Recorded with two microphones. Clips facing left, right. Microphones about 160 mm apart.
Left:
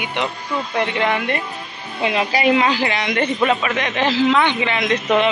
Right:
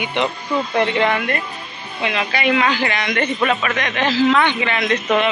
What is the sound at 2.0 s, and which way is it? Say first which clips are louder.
A woman's voice: left 3 dB; 30° left (ahead or behind).